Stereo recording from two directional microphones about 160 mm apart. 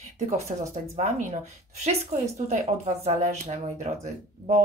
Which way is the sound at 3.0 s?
45° right (ahead or behind).